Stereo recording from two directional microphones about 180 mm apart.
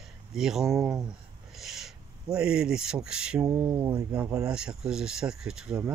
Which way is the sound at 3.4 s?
15° right (ahead or behind).